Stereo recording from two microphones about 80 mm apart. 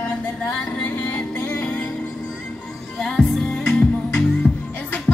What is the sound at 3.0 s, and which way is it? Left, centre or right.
Music, centre.